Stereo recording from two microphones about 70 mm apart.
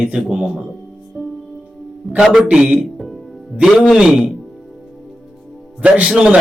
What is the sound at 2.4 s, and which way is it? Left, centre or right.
Speech, centre.